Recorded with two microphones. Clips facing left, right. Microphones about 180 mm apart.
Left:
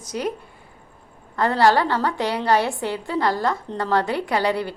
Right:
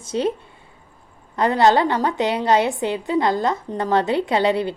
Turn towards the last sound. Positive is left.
turn(degrees=-20)  # may be behind; listen again after turning